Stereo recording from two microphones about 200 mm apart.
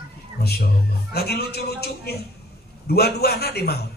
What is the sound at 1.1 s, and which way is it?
A man's voice, 50° left (ahead or behind).